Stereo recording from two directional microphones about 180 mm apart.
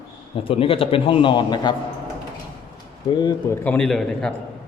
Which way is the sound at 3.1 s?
25° left (ahead or behind).